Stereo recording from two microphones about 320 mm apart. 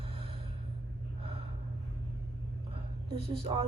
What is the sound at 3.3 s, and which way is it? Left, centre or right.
Speech, centre.